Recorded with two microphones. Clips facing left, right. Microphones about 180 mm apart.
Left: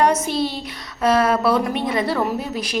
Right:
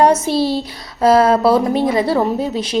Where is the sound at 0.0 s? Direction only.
30° right (ahead or behind).